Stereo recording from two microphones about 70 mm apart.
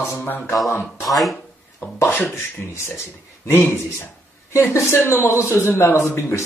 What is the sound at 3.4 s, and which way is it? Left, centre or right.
Speech, left.